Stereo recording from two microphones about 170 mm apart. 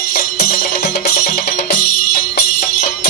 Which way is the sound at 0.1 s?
65° left (ahead or behind).